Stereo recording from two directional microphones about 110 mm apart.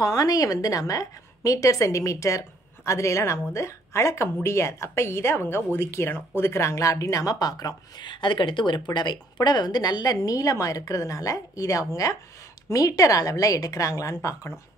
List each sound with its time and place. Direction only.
0.0 s a woman's voice: 35° left (ahead or behind)